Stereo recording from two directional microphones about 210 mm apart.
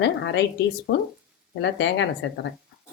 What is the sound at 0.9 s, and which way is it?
Speech, 65° left (ahead or behind).